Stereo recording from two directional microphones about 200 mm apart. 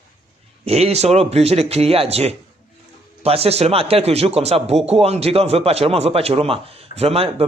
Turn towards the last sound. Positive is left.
turn(degrees=-30)  # may be behind; listen again after turning